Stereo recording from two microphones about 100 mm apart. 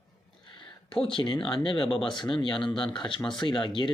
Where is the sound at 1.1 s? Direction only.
55° left (ahead or behind).